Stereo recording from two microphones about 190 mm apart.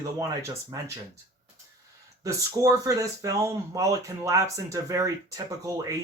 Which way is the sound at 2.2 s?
15° right (ahead or behind).